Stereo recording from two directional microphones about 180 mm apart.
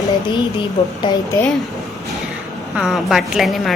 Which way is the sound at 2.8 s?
Centre (ahead or behind).